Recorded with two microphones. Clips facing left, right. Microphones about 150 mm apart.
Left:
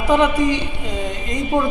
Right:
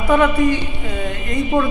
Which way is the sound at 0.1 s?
20° left (ahead or behind).